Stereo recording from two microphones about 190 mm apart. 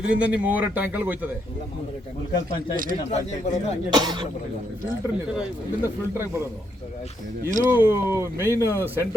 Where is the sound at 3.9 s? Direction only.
20° right (ahead or behind).